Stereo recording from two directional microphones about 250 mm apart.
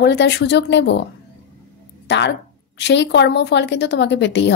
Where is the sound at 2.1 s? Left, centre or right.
Left.